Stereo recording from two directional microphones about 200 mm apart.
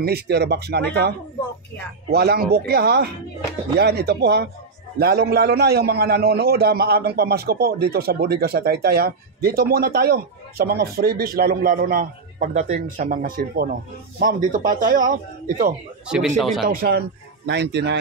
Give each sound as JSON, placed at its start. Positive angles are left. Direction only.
{"t": 0.0, "sound": "a man's voice", "side_deg": -55}
{"t": 16.3, "sound": "speech", "side_deg": 0}
{"t": 16.6, "sound": "a man's voice", "side_deg": -50}
{"t": 17.5, "sound": "speech", "side_deg": -60}